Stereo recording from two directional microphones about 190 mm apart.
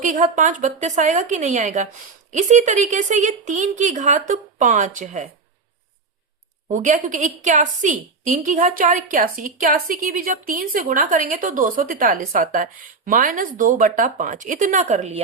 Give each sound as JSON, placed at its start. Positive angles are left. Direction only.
{"t": 0.0, "sound": "a woman's voice", "side_deg": -40}
{"t": 6.7, "sound": "a woman's voice", "side_deg": -40}